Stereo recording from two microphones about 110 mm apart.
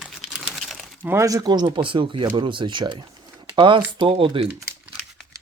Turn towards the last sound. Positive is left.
turn(degrees=-55)  # may be behind; listen again after turning